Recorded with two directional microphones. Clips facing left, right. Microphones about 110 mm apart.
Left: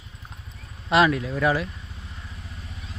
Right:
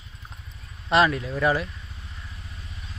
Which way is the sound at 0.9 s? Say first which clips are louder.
Left 1 dB; 5° left (ahead or behind).